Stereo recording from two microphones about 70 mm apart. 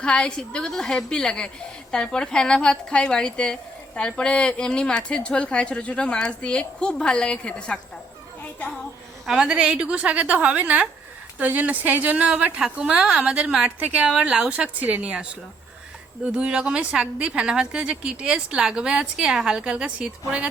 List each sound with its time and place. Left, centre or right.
0.0 s a woman's voice: centre
9.4 s a woman's voice: centre